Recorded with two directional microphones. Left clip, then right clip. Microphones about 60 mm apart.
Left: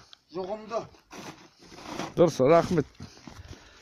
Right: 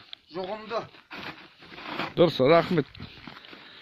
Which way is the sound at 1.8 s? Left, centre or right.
Centre.